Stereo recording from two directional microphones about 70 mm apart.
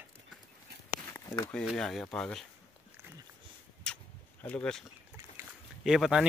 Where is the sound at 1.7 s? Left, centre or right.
Centre.